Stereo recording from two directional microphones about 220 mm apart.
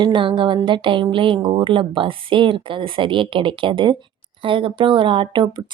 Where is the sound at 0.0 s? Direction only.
20° right (ahead or behind).